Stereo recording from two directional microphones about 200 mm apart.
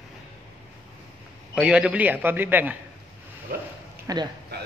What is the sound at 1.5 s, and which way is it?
A man's voice, 5° right (ahead or behind).